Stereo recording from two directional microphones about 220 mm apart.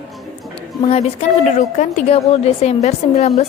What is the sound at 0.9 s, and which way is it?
A woman's voice, 30° left (ahead or behind).